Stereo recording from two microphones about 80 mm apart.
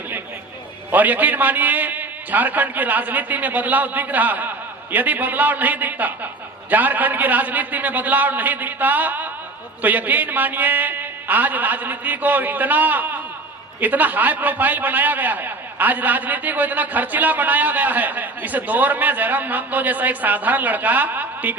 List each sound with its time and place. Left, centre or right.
0.9 s a man's voice: right